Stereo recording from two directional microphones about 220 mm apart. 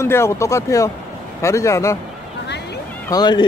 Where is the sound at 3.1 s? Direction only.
20° left (ahead or behind).